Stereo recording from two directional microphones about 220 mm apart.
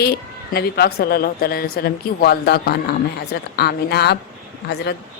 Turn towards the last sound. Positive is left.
turn(degrees=50)  # may be behind; listen again after turning